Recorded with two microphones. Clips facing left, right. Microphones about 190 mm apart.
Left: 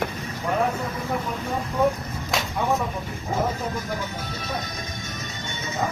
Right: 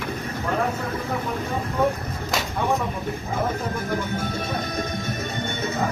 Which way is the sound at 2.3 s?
Centre (ahead or behind).